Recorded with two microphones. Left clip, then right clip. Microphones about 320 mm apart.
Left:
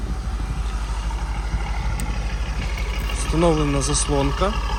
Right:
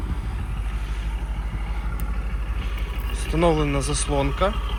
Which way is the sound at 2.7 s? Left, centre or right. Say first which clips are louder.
Left 6 dB; centre.